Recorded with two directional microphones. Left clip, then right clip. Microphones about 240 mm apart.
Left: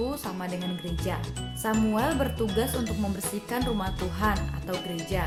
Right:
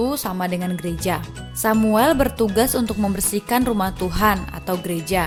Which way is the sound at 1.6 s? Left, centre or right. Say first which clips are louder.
Right 10 dB; right.